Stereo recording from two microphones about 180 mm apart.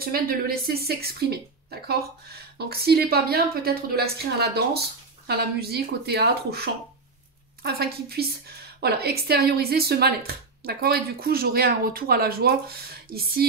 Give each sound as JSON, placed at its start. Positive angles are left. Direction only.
{"t": 0.0, "sound": "speech", "side_deg": -55}